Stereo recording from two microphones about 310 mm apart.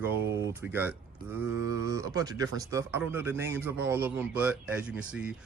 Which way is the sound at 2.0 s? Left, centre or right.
Centre.